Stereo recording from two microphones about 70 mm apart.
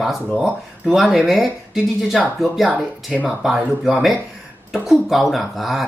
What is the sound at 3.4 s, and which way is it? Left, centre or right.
Speech, centre.